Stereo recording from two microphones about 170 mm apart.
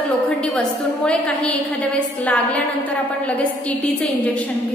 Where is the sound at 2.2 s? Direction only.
10° left (ahead or behind).